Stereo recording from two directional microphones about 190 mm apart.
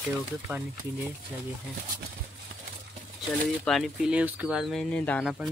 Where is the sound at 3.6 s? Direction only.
Centre (ahead or behind).